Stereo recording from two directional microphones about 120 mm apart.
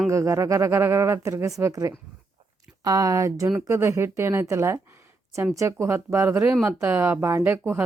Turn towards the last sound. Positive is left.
turn(degrees=-15)  # may be behind; listen again after turning